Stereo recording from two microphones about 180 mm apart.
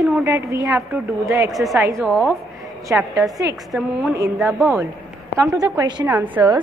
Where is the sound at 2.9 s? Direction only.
20° right (ahead or behind).